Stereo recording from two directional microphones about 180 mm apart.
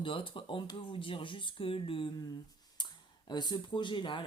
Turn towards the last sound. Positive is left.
turn(degrees=25)  # may be behind; listen again after turning